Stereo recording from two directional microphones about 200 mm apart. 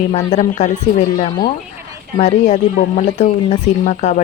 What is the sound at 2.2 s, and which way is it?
Speech, 35° left (ahead or behind).